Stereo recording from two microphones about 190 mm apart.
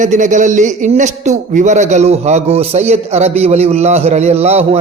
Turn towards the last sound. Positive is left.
turn(degrees=-35)  # may be behind; listen again after turning